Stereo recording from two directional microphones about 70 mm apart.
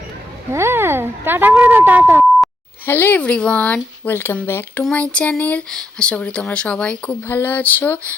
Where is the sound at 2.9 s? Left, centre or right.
Left.